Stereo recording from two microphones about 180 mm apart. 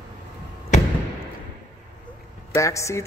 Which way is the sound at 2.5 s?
15° left (ahead or behind).